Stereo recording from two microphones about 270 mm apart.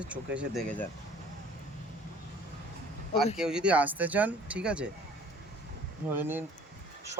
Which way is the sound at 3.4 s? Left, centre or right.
Centre.